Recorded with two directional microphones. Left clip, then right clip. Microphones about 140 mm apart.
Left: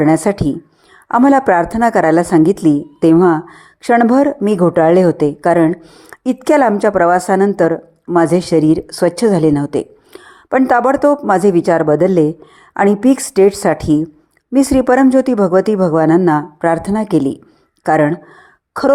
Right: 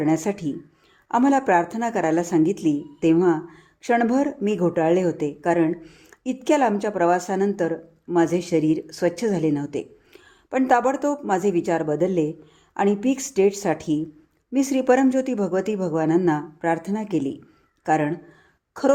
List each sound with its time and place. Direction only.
0.0 s a woman's voice: 35° left (ahead or behind)